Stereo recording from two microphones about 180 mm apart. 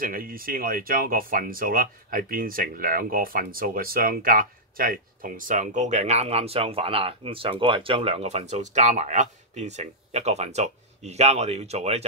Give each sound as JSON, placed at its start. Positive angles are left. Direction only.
{"t": 0.0, "sound": "speech", "side_deg": -50}